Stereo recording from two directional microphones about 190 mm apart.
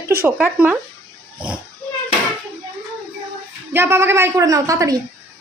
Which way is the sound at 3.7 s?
10° right (ahead or behind).